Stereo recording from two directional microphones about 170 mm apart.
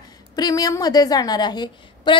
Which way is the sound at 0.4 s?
20° left (ahead or behind).